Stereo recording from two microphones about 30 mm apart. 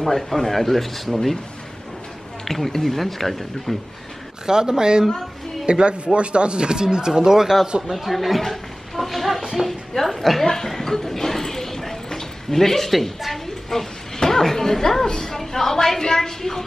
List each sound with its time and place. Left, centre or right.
0.0 s speech: centre
2.4 s a woman's voice: centre
4.5 s speech: right
7.8 s speech: centre
9.4 s a sound: centre
9.7 s a woman's voice: centre
10.4 s a sound: centre
12.9 s a woman's voice: centre